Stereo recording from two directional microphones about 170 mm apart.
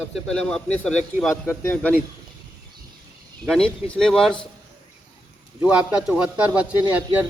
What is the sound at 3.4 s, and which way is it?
Speech, 5° left (ahead or behind).